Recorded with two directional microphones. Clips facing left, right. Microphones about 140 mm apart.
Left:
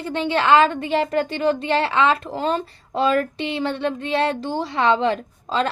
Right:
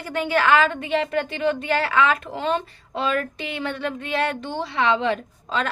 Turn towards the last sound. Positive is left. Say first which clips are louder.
# left 3 dB
turn(degrees=35)  # may be behind; listen again after turning